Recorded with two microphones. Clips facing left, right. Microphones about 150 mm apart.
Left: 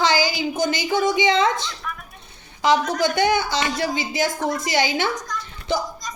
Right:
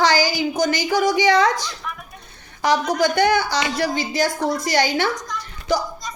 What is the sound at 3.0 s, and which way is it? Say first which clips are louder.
A woman's voice: right 2 dB; 20° left (ahead or behind).